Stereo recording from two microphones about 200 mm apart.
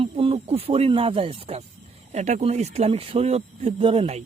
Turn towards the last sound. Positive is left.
turn(degrees=-25)  # may be behind; listen again after turning